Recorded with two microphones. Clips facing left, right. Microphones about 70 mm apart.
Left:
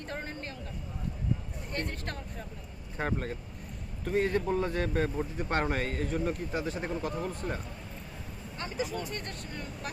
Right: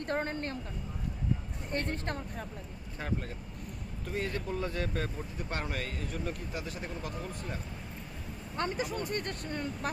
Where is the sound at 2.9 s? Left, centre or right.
Left.